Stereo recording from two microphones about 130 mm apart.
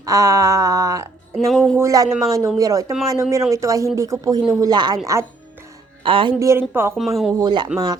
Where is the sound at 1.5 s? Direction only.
5° left (ahead or behind).